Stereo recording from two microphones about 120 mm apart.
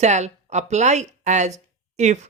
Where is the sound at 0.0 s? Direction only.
70° right (ahead or behind).